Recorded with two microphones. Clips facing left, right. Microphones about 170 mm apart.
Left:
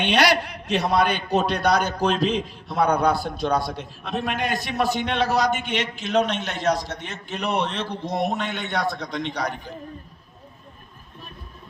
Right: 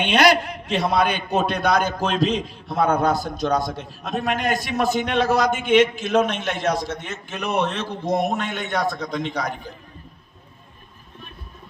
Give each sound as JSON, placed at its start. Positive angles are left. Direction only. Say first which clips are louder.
{"t": 0.0, "sound": "a man's voice", "louder": "right 3 dB", "side_deg": -50}